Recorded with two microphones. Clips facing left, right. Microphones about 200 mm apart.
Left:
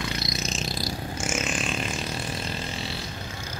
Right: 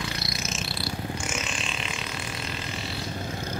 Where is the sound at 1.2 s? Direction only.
45° left (ahead or behind).